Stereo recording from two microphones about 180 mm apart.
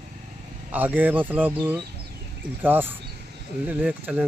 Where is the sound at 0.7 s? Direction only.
10° right (ahead or behind).